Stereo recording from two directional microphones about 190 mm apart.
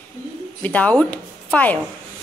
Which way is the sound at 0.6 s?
10° left (ahead or behind).